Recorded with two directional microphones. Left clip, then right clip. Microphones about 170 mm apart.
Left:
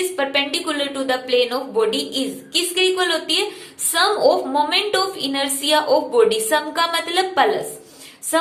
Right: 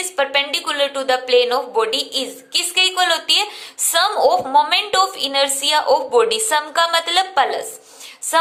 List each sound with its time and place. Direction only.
0.2 s a woman's voice: 40° right (ahead or behind)
8.3 s music: 35° right (ahead or behind)